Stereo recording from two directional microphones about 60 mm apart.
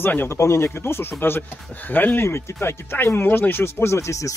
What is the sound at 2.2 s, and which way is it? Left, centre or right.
Speech, left.